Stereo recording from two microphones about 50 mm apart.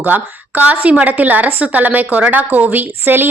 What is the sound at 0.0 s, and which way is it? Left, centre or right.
A woman's voice, right.